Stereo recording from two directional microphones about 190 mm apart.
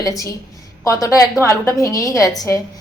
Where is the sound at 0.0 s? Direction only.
20° left (ahead or behind).